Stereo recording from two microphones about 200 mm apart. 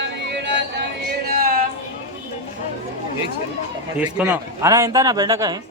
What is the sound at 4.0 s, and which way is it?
A man's voice, 5° right (ahead or behind).